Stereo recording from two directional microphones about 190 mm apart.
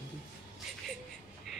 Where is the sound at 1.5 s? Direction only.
Centre (ahead or behind).